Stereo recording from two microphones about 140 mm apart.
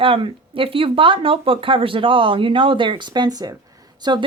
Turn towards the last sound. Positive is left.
turn(degrees=-30)  # may be behind; listen again after turning